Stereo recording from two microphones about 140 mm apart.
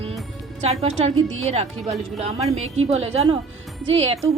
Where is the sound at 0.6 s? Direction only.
50° right (ahead or behind).